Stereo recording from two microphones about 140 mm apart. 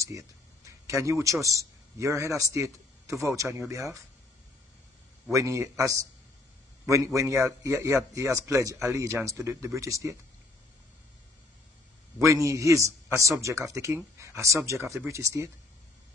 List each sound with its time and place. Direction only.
0.8 s speech: 20° right (ahead or behind)
5.3 s speech: 20° right (ahead or behind)
12.3 s speech: 20° right (ahead or behind)